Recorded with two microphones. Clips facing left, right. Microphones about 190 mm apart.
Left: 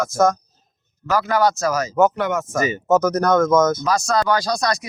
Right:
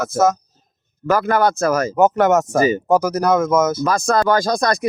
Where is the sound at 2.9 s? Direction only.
10° right (ahead or behind).